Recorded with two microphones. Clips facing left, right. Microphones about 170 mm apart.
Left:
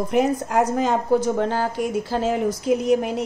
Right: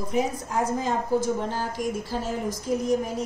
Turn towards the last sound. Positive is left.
turn(degrees=70)  # may be behind; listen again after turning